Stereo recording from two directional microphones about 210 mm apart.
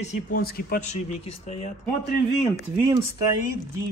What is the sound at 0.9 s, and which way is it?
Speech, 30° left (ahead or behind).